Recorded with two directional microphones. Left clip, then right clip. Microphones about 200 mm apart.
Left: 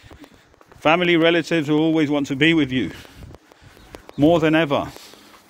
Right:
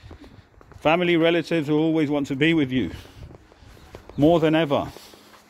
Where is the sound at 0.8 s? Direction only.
5° right (ahead or behind).